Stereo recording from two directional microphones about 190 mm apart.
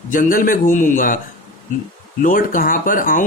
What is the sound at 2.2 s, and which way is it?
Speech, 45° left (ahead or behind).